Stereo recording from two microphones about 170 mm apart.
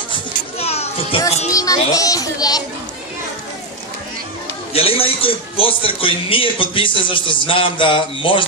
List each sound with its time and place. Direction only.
0.6 s children playing: 40° left (ahead or behind)
1.5 s speech: 20° left (ahead or behind)
4.7 s speech: 35° left (ahead or behind)